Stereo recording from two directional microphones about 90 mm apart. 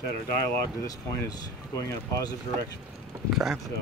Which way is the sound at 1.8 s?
40° left (ahead or behind).